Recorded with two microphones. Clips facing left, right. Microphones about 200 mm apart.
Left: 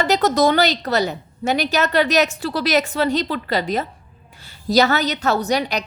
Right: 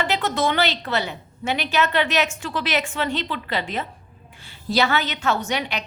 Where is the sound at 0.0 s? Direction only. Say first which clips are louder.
Left 6 dB; 40° left (ahead or behind).